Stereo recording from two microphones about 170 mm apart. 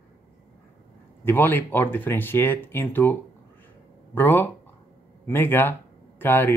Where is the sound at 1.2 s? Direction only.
10° left (ahead or behind).